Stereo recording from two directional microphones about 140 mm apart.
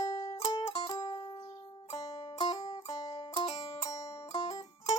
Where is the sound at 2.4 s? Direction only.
30° left (ahead or behind).